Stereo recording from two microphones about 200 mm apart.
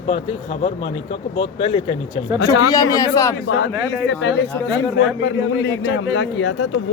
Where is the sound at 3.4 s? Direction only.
70° left (ahead or behind).